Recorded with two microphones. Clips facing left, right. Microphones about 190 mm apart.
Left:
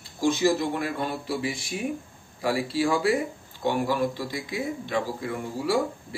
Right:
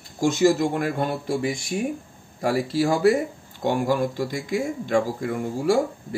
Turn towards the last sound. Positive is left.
turn(degrees=-45)  # may be behind; listen again after turning